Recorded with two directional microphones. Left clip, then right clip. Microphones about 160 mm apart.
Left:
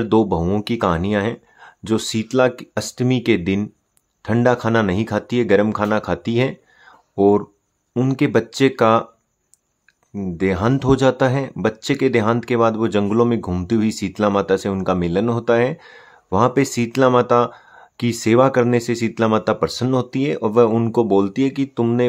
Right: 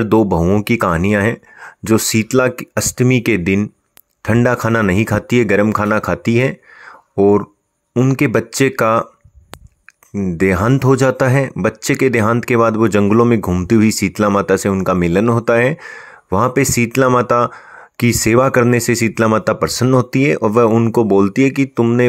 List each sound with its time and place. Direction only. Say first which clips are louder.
0.0 s speech: right 4 dB; 25° right (ahead or behind)
10.3 s speech: right 4 dB; 25° right (ahead or behind)